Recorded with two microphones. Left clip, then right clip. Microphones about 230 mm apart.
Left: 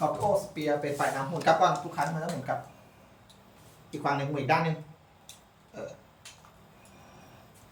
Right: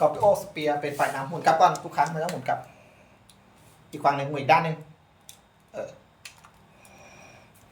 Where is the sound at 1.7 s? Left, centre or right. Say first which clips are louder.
Right 5 dB; right.